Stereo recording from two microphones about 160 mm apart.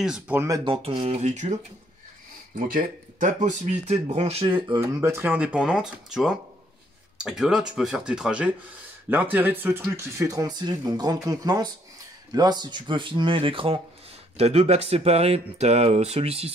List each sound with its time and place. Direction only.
0.0 s speech: 5° right (ahead or behind)
0.7 s speech: 35° right (ahead or behind)
2.5 s speech: 60° right (ahead or behind); by 4.7 s 30° right (ahead or behind)
4.7 s speech: 15° right (ahead or behind); by 16.5 s 40° right (ahead or behind)